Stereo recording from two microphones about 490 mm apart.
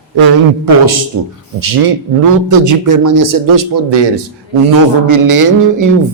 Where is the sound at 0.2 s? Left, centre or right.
Right.